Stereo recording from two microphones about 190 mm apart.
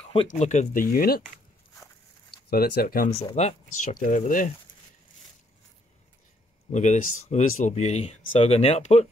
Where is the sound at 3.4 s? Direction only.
35° left (ahead or behind).